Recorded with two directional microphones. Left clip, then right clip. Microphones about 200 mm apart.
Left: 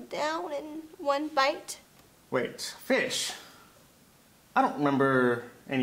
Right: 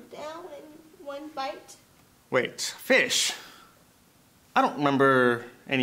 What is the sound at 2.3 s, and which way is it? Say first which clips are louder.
Speech: right 4 dB; 75° right (ahead or behind).